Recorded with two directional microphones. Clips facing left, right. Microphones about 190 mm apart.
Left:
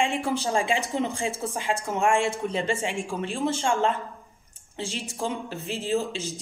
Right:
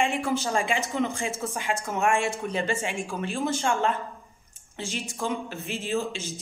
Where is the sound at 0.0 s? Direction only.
30° left (ahead or behind).